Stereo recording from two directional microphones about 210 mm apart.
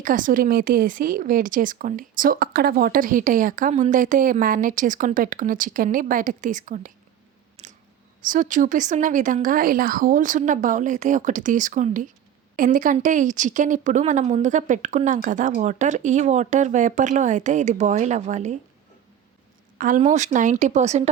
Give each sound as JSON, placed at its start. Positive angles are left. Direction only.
{"t": 0.0, "sound": "speech", "side_deg": -40}
{"t": 7.5, "sound": "squish", "side_deg": -35}
{"t": 8.2, "sound": "speech", "side_deg": -40}
{"t": 19.8, "sound": "speech", "side_deg": -35}